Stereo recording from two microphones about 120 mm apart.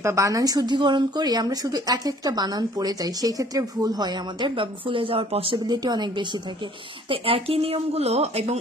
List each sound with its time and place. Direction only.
0.0 s speech: 25° right (ahead or behind); by 5.6 s 50° right (ahead or behind)
5.7 s speech: 35° right (ahead or behind)
7.1 s speech: 50° right (ahead or behind)